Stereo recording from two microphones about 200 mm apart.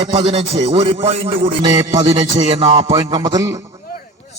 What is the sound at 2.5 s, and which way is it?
A man's voice, 25° right (ahead or behind).